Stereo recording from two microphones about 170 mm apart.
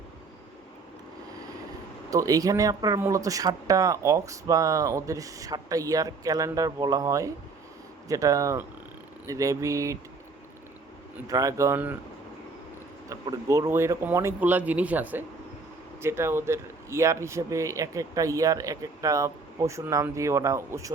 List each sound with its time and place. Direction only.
2.0 s speech: 20° right (ahead or behind)
11.3 s speech: 20° right (ahead or behind)
13.1 s speech: 20° right (ahead or behind)